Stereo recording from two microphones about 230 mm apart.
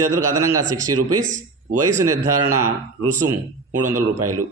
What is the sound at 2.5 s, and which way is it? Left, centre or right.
A man's voice, right.